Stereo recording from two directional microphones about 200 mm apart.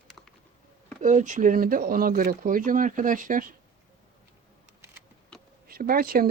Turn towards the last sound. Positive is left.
turn(degrees=-45)  # may be behind; listen again after turning